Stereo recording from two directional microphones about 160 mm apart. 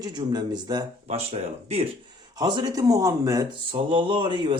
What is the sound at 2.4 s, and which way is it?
Speech, 25° right (ahead or behind).